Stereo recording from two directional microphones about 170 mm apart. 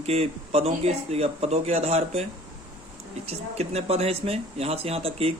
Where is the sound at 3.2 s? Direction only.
40° right (ahead or behind).